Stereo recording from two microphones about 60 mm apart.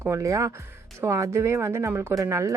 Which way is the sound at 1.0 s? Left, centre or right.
Right.